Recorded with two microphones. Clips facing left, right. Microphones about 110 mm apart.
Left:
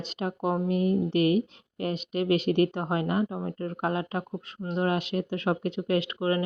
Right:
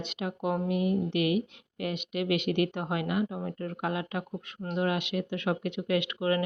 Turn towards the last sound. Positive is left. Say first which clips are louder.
# left 1 dB
turn(degrees=30)  # may be behind; listen again after turning